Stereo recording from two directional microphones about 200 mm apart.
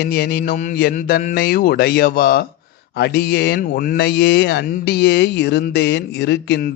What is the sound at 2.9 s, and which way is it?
Speech, 55° left (ahead or behind).